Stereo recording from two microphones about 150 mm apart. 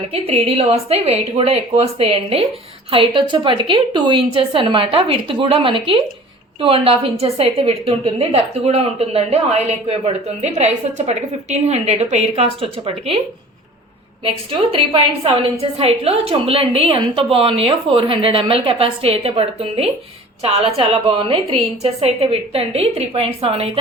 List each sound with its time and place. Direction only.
0.1 s a woman's voice: 40° right (ahead or behind)
14.3 s a woman's voice: 40° right (ahead or behind)